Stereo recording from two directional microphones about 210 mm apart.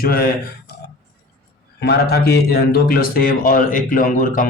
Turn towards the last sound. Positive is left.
turn(degrees=40)  # may be behind; listen again after turning